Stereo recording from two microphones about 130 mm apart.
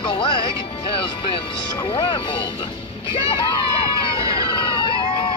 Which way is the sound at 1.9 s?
40° left (ahead or behind).